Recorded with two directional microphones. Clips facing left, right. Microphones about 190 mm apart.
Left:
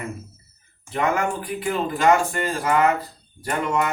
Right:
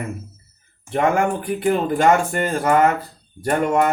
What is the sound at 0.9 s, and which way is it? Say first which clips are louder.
Speech: right 4 dB; 50° right (ahead or behind).